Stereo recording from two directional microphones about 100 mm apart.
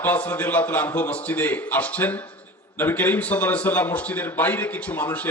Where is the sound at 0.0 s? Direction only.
20° left (ahead or behind).